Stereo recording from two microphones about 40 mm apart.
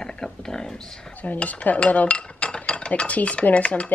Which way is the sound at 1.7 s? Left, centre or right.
Left.